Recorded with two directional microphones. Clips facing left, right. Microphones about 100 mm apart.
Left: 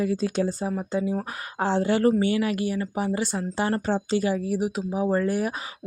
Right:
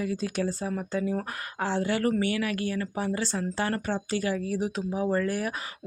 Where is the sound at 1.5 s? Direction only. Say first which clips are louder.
Left 5 dB; 30° left (ahead or behind).